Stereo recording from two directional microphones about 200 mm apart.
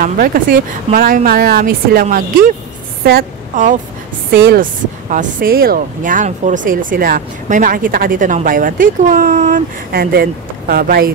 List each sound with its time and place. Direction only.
0.0 s a woman's voice: 45° right (ahead or behind)